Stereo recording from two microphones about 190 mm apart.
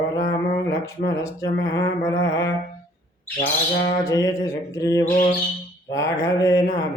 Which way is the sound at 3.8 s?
15° left (ahead or behind).